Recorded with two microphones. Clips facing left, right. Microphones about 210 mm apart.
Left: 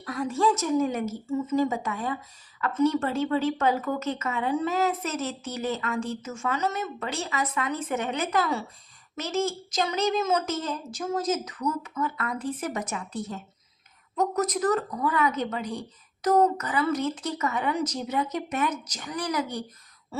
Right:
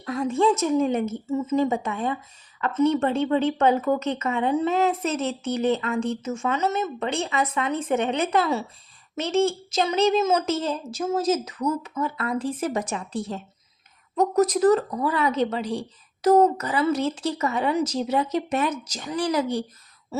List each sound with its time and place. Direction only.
0.0 s a woman's voice: 25° right (ahead or behind)
14.2 s speech: 30° right (ahead or behind)